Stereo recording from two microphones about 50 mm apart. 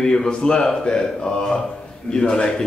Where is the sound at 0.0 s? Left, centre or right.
Centre.